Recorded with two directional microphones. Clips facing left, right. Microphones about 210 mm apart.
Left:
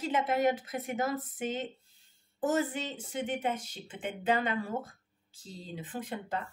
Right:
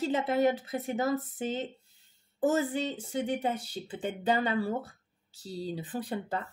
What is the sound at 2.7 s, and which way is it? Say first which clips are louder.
Speech: right 5 dB; 35° right (ahead or behind).